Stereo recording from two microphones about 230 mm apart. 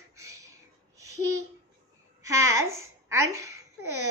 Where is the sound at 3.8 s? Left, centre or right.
Right.